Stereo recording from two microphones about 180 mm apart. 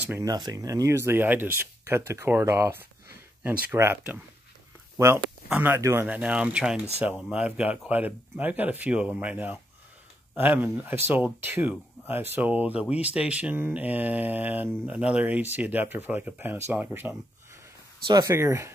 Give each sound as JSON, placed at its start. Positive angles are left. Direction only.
{"t": 0.0, "sound": "speech", "side_deg": -10}
{"t": 0.3, "sound": "speech", "side_deg": -20}